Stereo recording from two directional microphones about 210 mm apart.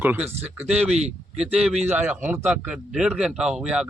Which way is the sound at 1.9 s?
10° right (ahead or behind).